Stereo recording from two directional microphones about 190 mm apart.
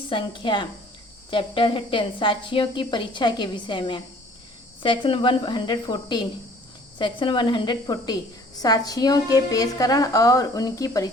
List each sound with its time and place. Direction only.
0.1 s a woman's voice: 25° left (ahead or behind)